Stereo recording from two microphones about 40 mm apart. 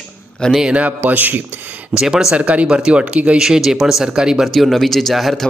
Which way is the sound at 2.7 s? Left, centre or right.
Right.